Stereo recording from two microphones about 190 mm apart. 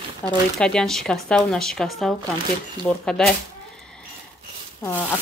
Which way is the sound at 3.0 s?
5° left (ahead or behind).